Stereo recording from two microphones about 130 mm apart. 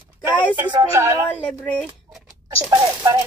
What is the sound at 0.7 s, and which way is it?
Speech, 25° right (ahead or behind).